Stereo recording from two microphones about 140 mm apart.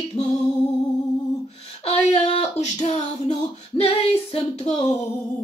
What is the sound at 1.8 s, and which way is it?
Music, 50° left (ahead or behind).